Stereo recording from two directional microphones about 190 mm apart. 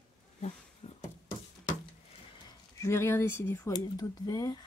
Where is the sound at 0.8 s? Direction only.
30° left (ahead or behind).